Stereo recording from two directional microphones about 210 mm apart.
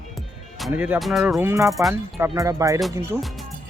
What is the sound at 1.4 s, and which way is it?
Speech, 15° right (ahead or behind).